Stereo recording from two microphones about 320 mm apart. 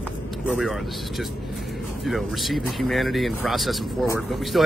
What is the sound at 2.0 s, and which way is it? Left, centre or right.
Speech, centre.